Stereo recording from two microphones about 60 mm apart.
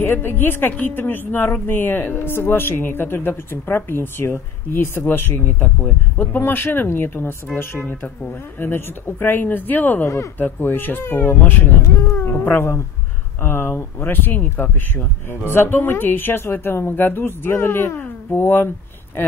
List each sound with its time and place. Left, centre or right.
0.0 s a woman's voice: left
7.8 s a woman's voice: left